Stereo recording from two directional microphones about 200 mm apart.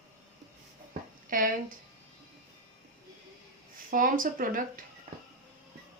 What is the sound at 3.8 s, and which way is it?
Speech, 45° right (ahead or behind).